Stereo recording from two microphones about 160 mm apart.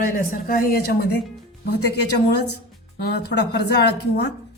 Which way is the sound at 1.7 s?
90° left.